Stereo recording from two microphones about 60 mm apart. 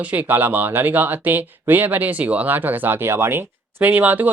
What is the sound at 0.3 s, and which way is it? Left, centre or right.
Speech, right.